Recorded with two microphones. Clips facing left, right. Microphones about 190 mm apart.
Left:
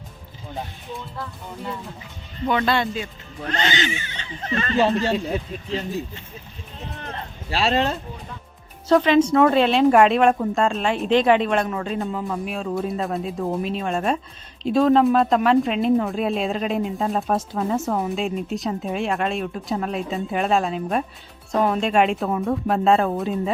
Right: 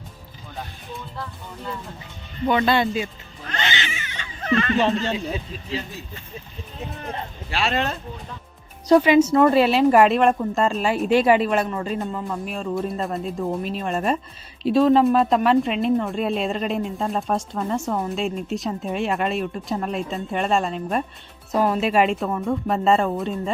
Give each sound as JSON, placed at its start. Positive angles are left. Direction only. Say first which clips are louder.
{"t": 2.5, "sound": "speech", "louder": "right 2 dB", "side_deg": 0}
{"t": 3.5, "sound": "speech", "louder": "left 4 dB", "side_deg": 35}
{"t": 6.9, "sound": "speech", "louder": "right 2 dB", "side_deg": -5}
{"t": 7.5, "sound": "speech", "louder": "left 3 dB", "side_deg": 30}
{"t": 8.9, "sound": "speech", "louder": "right 1 dB", "side_deg": -10}